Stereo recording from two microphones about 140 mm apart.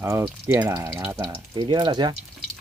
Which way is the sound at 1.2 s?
30° right (ahead or behind).